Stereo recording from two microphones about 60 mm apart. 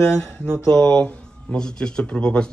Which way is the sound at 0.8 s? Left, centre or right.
Left.